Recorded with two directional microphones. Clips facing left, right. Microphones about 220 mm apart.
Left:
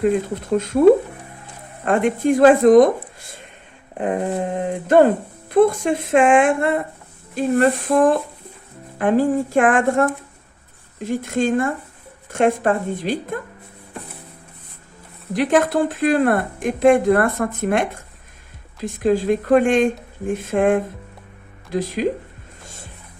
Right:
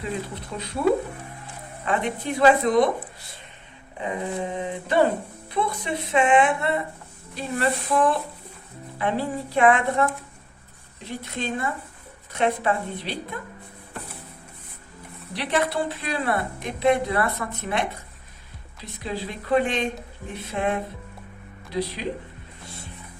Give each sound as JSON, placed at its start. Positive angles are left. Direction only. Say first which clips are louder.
{"t": 0.0, "sound": "speech", "louder": "left 12 dB", "side_deg": 50}
{"t": 1.8, "sound": "speech", "louder": "left 8 dB", "side_deg": 50}
{"t": 15.3, "sound": "speech", "louder": "left 8 dB", "side_deg": 45}
{"t": 22.6, "sound": "music", "louder": "even", "side_deg": 45}